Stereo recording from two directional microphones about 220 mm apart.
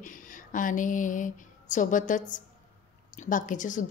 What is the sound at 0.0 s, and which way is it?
A woman's voice, 35° left (ahead or behind).